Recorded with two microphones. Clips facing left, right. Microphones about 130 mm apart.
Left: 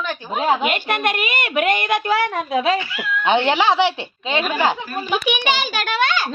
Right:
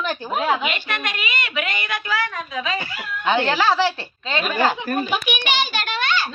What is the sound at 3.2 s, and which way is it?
Speech, 25° left (ahead or behind).